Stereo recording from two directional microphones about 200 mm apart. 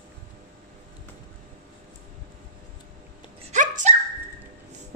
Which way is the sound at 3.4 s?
35° right (ahead or behind).